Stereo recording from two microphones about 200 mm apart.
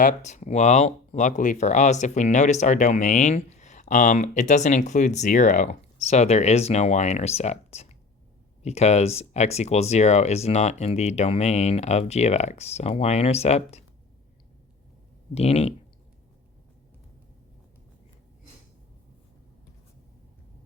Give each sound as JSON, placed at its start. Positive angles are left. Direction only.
{"t": 0.0, "sound": "speech", "side_deg": 40}
{"t": 15.4, "sound": "speech", "side_deg": 30}